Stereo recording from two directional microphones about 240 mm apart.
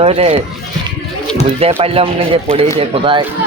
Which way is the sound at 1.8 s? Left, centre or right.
Right.